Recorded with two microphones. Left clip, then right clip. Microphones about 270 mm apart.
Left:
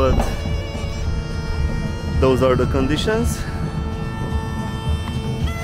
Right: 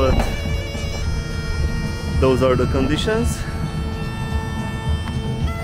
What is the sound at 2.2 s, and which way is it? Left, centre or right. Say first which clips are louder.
Speech: even; centre.